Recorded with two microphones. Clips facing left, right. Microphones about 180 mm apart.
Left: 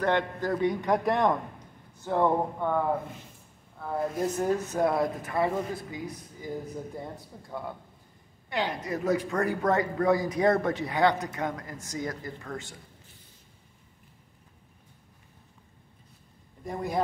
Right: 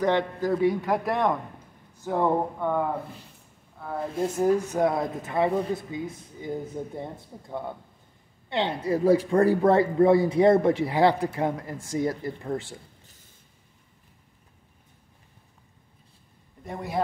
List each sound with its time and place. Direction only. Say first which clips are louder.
0.0 s a man's voice: right 3 dB; 10° right (ahead or behind)
4.4 s speech: right 5 dB; 20° right (ahead or behind)
16.6 s a man's voice: even; centre (ahead or behind)